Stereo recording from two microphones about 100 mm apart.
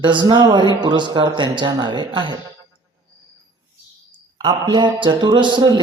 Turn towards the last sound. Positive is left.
turn(degrees=-50)  # may be behind; listen again after turning